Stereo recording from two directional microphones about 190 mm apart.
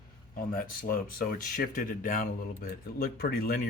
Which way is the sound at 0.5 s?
50° left (ahead or behind).